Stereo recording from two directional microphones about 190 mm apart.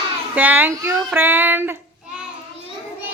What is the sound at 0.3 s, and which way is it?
Child singing, 10° right (ahead or behind).